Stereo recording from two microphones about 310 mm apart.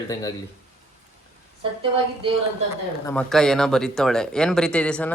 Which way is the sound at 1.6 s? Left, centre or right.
Centre.